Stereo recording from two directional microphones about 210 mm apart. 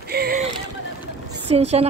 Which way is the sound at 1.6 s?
30° right (ahead or behind).